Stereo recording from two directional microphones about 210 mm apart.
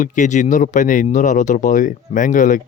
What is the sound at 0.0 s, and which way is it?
Speech, 35° left (ahead or behind).